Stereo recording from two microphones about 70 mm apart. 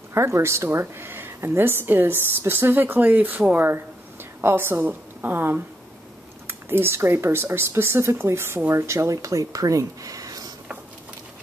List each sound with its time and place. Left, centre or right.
0.1 s speech: right